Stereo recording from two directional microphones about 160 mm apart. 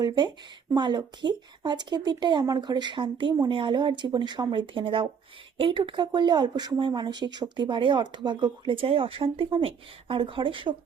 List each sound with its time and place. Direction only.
0.0 s speech: 25° right (ahead or behind)